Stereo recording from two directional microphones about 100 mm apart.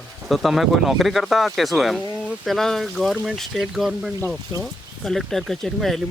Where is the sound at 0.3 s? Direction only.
Centre (ahead or behind).